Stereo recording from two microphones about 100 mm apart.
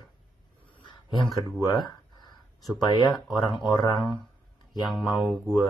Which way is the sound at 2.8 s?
40° left (ahead or behind).